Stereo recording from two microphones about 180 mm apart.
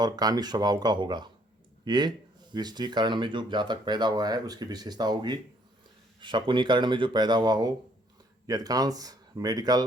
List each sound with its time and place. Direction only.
0.0 s speech: 20° right (ahead or behind)